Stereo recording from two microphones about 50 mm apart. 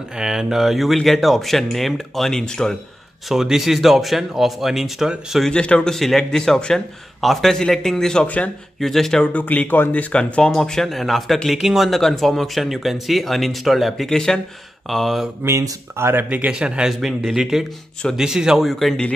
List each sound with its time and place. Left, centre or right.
0.2 s speech: centre
3.3 s speech: centre
5.5 s speech: left
5.9 s speech: centre
9.3 s speech: left
10.1 s speech: centre
15.4 s speech: right
16.3 s speech: right
16.5 s speech: centre
18.7 s speech: centre